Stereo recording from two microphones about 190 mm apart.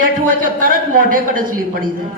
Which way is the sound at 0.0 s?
50° right (ahead or behind).